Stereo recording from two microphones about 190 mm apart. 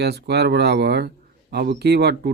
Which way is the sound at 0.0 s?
60° right (ahead or behind).